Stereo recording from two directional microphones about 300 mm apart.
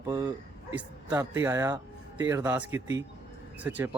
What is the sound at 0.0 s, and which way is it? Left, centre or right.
Speech, centre.